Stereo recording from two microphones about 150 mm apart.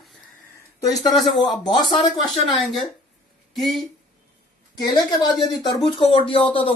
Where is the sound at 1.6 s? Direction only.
30° left (ahead or behind).